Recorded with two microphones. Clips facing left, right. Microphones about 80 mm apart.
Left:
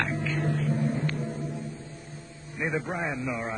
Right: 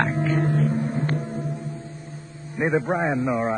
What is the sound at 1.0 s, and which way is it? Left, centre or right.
Music, right.